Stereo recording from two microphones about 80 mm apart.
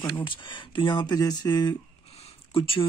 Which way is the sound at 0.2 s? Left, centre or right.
Left.